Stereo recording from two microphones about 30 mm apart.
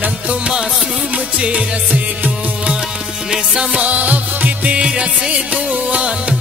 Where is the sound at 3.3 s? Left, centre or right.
Right.